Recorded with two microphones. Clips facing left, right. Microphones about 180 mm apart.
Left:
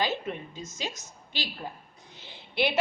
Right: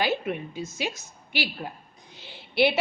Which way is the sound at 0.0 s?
10° right (ahead or behind).